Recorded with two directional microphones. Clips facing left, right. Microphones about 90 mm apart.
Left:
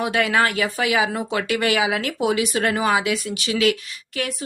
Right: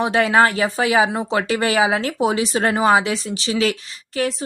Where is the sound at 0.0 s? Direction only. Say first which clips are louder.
Right 4 dB; 30° right (ahead or behind).